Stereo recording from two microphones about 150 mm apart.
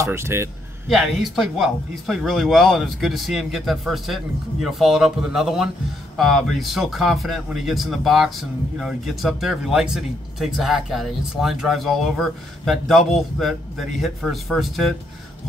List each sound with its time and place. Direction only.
0.0 s a man's voice: 15° right (ahead or behind)
0.8 s speech: centre (ahead or behind)